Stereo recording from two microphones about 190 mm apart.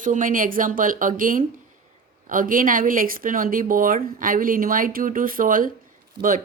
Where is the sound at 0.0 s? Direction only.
45° right (ahead or behind).